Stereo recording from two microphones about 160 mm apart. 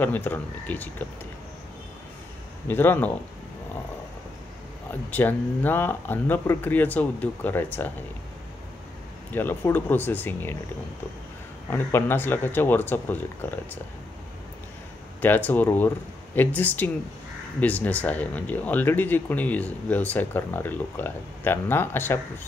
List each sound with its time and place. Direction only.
0.0 s speech: 10° left (ahead or behind)
2.7 s speech: 15° left (ahead or behind)
5.1 s speech: 10° left (ahead or behind)
9.3 s speech: 10° left (ahead or behind)
11.7 s speech: 15° left (ahead or behind)
15.2 s speech: 10° left (ahead or behind)